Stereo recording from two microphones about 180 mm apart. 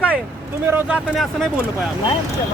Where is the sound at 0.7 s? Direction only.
10° right (ahead or behind).